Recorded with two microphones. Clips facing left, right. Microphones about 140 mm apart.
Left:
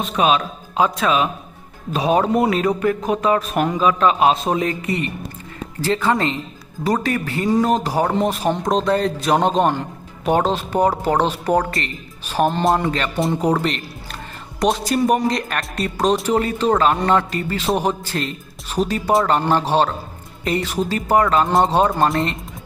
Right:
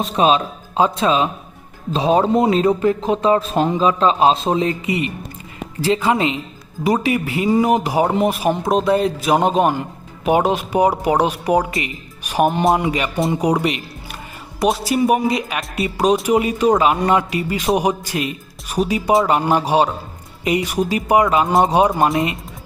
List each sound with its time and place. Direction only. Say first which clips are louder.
0.0 s a man's voice: right 2 dB; 30° right (ahead or behind)
4.9 s speech: right 2 dB; 10° right (ahead or behind)
21.7 s speech: right 2 dB; 15° right (ahead or behind)